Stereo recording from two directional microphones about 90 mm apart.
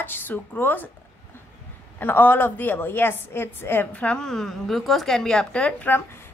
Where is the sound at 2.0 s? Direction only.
20° left (ahead or behind).